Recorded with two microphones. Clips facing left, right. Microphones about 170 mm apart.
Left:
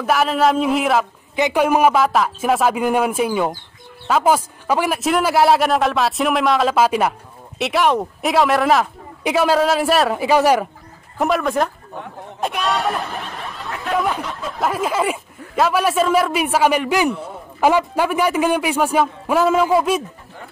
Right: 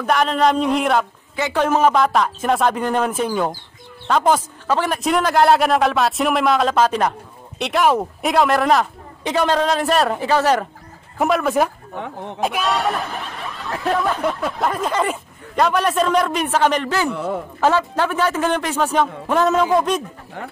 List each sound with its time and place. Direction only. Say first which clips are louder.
0.0 s speech: even; 5° left (ahead or behind)
1.3 s a man's voice: left 2 dB; 15° left (ahead or behind)
11.1 s speech: right 1 dB; centre (ahead or behind)
14.2 s a sound: right 9 dB; 55° right (ahead or behind)
14.6 s a man's voice: left 2 dB; 5° left (ahead or behind)
17.1 s a man's voice: right 4 dB; 70° right (ahead or behind)
17.6 s a man's voice: left 3 dB; 10° left (ahead or behind)